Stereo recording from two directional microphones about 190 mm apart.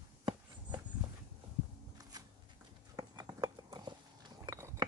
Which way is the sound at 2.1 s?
20° right (ahead or behind).